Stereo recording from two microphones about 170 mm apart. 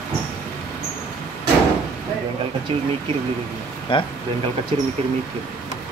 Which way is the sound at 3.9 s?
30° left (ahead or behind).